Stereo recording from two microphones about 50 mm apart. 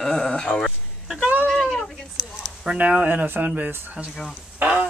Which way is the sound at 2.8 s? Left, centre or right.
Right.